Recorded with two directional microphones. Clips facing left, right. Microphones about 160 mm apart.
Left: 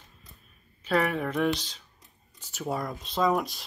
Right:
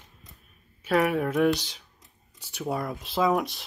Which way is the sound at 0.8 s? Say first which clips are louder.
Right 3 dB; 5° right (ahead or behind).